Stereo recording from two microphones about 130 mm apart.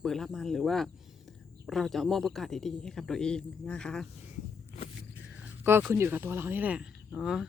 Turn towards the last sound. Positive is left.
turn(degrees=-5)  # may be behind; listen again after turning